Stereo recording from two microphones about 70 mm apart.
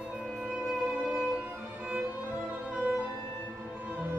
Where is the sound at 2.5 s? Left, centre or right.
Centre.